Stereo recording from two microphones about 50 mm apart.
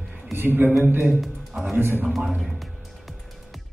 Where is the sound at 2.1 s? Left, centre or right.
Centre.